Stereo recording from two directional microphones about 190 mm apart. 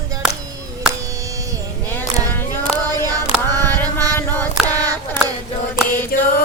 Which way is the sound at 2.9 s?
20° right (ahead or behind).